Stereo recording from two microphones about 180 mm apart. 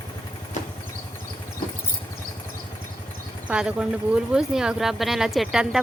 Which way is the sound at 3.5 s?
5° right (ahead or behind).